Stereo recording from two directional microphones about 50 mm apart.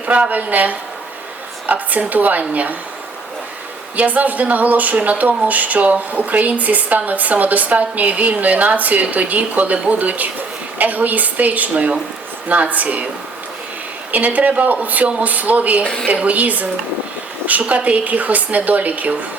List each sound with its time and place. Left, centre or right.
0.0 s speech: right
3.9 s speech: right
14.1 s speech: right